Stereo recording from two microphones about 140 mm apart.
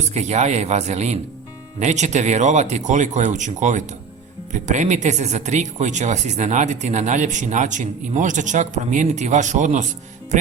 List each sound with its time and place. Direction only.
0.1 s speech: 55° right (ahead or behind)